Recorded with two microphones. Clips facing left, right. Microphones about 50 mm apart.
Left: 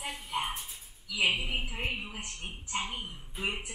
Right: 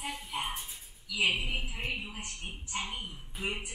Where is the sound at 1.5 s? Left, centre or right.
Left.